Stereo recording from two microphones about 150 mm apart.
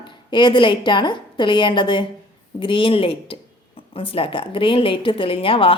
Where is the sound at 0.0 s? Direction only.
30° left (ahead or behind).